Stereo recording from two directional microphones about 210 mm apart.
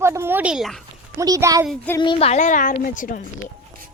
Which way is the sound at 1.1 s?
15° right (ahead or behind).